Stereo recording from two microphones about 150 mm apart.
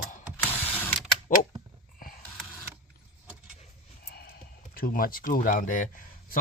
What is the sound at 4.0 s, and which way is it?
Snort, 80° left.